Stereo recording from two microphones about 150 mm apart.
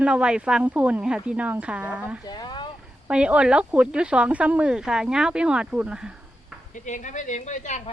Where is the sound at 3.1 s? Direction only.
10° right (ahead or behind).